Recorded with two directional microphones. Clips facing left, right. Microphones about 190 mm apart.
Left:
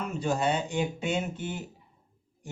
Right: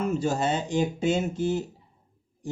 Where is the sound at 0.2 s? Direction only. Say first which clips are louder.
Right 2 dB; 35° right (ahead or behind).